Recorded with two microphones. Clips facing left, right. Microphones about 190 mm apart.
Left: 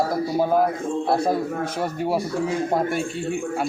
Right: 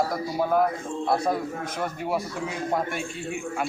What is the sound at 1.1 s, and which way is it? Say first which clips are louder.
Speech: left 2 dB; 30° left (ahead or behind).